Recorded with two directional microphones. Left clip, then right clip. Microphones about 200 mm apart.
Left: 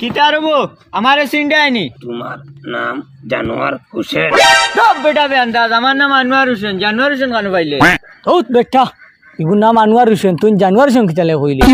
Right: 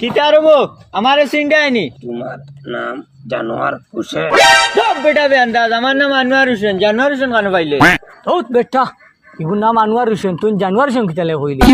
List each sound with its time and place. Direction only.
0.0 s speech: 50° left (ahead or behind)
4.3 s music: centre (ahead or behind)
5.1 s a man's voice: 40° left (ahead or behind)
7.7 s music: centre (ahead or behind)
8.2 s speech: 50° left (ahead or behind)